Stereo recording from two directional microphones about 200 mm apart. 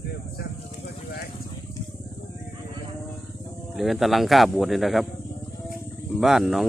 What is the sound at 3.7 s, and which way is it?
Speech, centre (ahead or behind).